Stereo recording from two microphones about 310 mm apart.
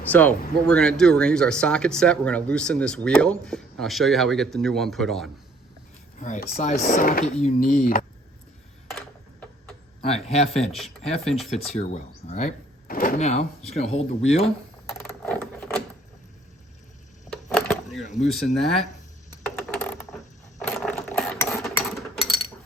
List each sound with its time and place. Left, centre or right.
0.1 s speech: centre
6.1 s speech: left
10.2 s speech: centre
10.7 s speech: centre
11.7 s speech: left
14.8 s a sound: centre
17.2 s a sound: centre
18.0 s speech: left
19.4 s coin: centre
20.7 s a sound: centre